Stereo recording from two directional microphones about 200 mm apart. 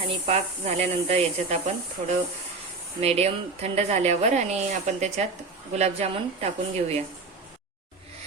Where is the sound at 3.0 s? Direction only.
30° right (ahead or behind).